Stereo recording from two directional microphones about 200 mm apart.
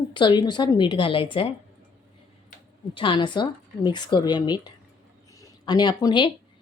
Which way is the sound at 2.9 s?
25° left (ahead or behind).